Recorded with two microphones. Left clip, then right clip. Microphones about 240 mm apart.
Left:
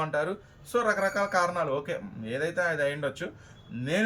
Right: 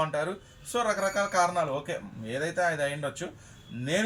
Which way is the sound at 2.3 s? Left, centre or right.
Left.